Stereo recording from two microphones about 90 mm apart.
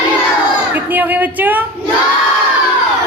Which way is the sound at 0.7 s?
20° right (ahead or behind).